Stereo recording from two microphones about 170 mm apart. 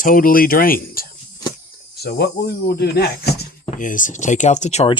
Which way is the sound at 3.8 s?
50° left (ahead or behind).